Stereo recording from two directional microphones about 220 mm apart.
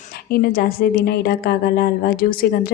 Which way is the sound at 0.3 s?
40° left (ahead or behind).